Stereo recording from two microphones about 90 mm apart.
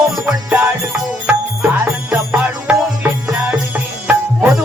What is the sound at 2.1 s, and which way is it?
Music, 15° right (ahead or behind).